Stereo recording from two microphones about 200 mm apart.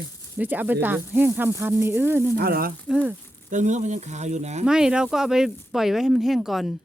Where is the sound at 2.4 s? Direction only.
50° right (ahead or behind).